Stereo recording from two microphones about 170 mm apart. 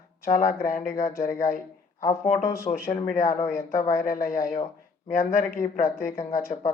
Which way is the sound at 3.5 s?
55° left (ahead or behind).